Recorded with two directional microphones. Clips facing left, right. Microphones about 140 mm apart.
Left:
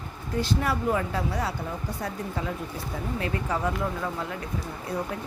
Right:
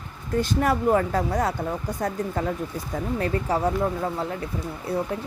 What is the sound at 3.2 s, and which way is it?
Speech, 35° right (ahead or behind).